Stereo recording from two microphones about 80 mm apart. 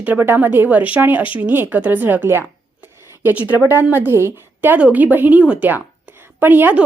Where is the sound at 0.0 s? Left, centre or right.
Right.